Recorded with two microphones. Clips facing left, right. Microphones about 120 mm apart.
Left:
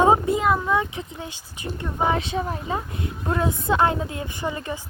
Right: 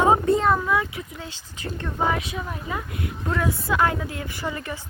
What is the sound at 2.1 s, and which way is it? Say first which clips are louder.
A woman's voice: left 4 dB; 30° left (ahead or behind).